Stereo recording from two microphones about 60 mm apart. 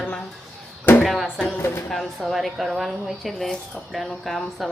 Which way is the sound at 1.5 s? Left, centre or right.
Left.